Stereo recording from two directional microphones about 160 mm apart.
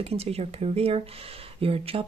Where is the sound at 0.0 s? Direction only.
40° right (ahead or behind).